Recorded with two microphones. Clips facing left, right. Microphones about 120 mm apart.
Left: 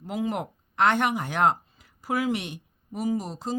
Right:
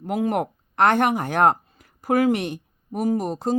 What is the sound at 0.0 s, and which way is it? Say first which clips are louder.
Speech: right 6 dB; 55° right (ahead or behind).